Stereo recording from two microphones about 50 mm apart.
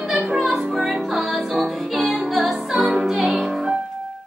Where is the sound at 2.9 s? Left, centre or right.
Centre.